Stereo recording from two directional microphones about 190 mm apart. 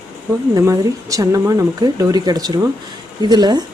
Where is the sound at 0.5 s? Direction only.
15° right (ahead or behind).